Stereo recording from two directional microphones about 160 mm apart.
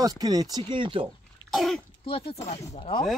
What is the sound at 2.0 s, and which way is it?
Speech, 35° left (ahead or behind).